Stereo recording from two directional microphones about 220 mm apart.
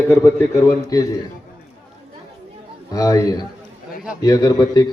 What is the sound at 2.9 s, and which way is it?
A man's voice, 15° left (ahead or behind).